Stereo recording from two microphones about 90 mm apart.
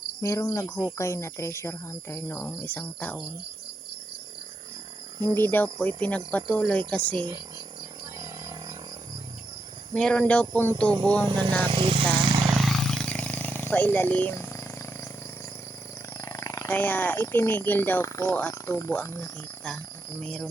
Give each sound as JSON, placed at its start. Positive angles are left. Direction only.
{"t": 0.2, "sound": "cricket", "side_deg": 30}
{"t": 2.6, "sound": "speech", "side_deg": 20}
{"t": 5.2, "sound": "speech", "side_deg": 25}
{"t": 9.9, "sound": "speech", "side_deg": 10}
{"t": 11.3, "sound": "speech", "side_deg": -60}
{"t": 11.7, "sound": "vehicle", "side_deg": -75}
{"t": 12.5, "sound": "roar", "side_deg": 0}
{"t": 13.1, "sound": "purr", "side_deg": 15}
{"t": 16.1, "sound": "wild animals", "side_deg": 35}
{"t": 16.6, "sound": "speech", "side_deg": 20}
{"t": 20.2, "sound": "speech", "side_deg": 10}